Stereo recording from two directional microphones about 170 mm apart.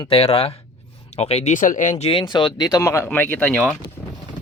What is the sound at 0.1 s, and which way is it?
Speech, 35° left (ahead or behind).